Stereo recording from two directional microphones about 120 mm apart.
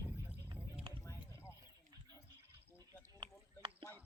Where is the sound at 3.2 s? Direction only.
45° right (ahead or behind).